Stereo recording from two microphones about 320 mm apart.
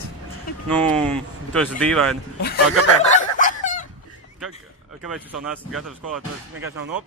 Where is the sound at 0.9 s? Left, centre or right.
Centre.